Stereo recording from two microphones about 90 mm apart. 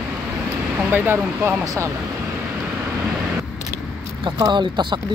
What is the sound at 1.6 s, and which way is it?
Speech, 40° right (ahead or behind).